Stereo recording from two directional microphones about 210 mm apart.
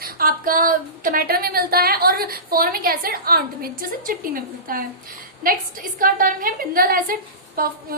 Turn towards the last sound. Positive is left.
turn(degrees=-45)  # may be behind; listen again after turning